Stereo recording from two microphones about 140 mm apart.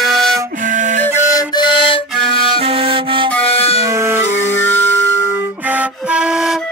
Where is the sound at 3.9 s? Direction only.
20° right (ahead or behind).